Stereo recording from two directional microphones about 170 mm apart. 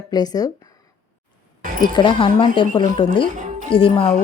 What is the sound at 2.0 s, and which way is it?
A woman's voice, 30° left (ahead or behind).